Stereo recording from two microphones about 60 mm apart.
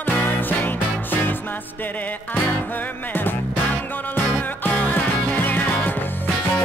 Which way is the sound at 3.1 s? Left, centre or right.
Left.